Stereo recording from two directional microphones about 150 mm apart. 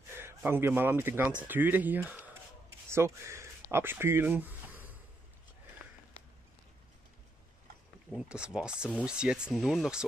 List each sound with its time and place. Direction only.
0.1 s a man's voice: 15° right (ahead or behind)
8.1 s speech: 5° right (ahead or behind)